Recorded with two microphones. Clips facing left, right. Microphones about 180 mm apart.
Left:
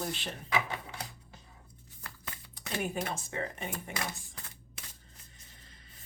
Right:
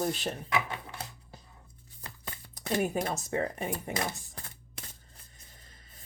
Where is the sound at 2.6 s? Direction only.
40° right (ahead or behind).